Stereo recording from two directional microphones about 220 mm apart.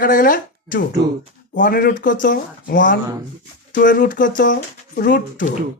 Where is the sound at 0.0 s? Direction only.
40° left (ahead or behind).